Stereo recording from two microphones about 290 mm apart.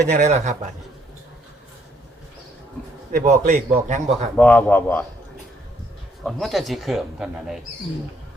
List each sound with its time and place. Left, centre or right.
0.1 s a man's voice: right
3.1 s a man's voice: right
4.4 s speech: centre
6.2 s speech: centre